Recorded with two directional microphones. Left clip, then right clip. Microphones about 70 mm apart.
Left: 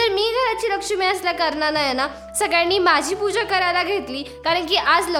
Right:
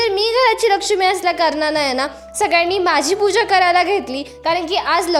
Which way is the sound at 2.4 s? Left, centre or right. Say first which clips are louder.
Right 4 dB; right.